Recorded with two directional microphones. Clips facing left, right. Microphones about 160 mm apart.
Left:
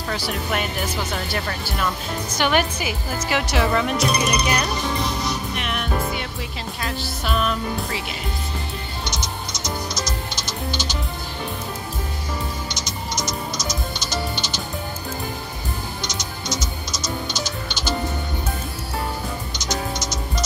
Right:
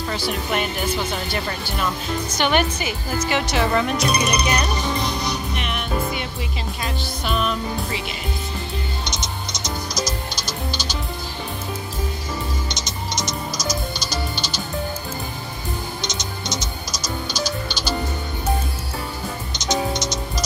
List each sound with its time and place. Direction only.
0.1 s speech: centre (ahead or behind)
2.3 s speech: 5° left (ahead or behind)
4.2 s music: centre (ahead or behind)
6.8 s speech: centre (ahead or behind)
12.6 s music: 20° right (ahead or behind)
13.6 s music: 25° left (ahead or behind)
16.0 s music: 20° right (ahead or behind)
17.3 s music: 20° left (ahead or behind)
19.6 s music: 20° right (ahead or behind)